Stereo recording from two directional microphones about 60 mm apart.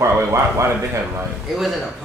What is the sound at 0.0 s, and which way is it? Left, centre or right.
Speech, right.